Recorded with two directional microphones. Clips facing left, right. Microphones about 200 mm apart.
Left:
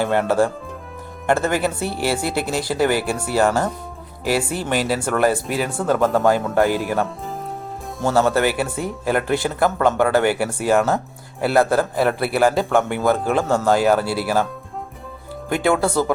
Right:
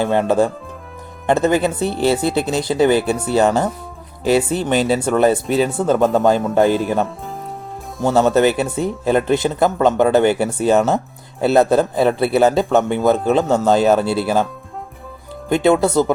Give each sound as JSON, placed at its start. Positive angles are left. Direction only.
{"t": 0.0, "sound": "speech", "side_deg": -20}
{"t": 15.4, "sound": "speech", "side_deg": -20}